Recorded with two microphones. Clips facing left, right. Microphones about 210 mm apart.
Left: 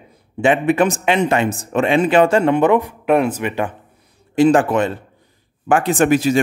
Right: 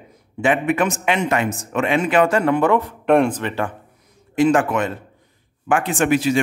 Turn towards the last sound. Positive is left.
turn(degrees=40)  # may be behind; listen again after turning